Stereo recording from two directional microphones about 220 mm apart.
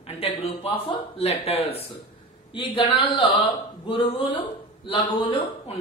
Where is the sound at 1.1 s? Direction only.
25° left (ahead or behind).